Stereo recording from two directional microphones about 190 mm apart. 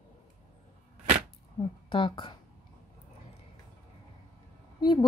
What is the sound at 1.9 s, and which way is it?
Speech, 25° left (ahead or behind).